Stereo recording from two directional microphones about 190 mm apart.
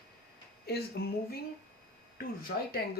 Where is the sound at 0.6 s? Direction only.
60° left (ahead or behind).